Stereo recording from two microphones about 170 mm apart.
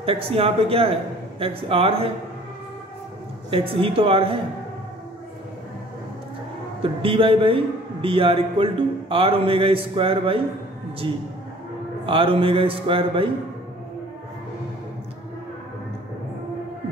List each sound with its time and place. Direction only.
0.0 s a man's voice: 35° right (ahead or behind)
3.4 s a man's voice: 30° right (ahead or behind)
6.8 s a man's voice: 30° right (ahead or behind)